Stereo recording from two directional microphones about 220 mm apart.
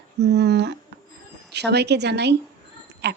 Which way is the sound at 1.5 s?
50° right (ahead or behind).